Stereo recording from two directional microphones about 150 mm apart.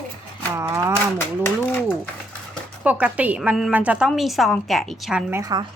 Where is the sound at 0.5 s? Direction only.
15° right (ahead or behind).